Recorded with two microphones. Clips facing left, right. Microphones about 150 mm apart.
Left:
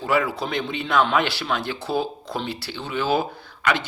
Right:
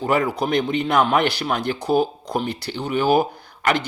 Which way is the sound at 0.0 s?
40° right (ahead or behind).